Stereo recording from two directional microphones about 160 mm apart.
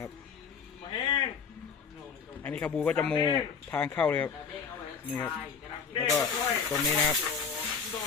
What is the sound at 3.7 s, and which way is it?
Speech, 10° left (ahead or behind).